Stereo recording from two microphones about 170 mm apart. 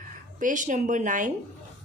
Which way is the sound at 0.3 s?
50° right (ahead or behind).